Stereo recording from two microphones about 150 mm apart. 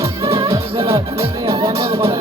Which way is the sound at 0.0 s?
20° right (ahead or behind).